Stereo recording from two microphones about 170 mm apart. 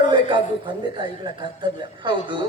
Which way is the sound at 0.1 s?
30° right (ahead or behind).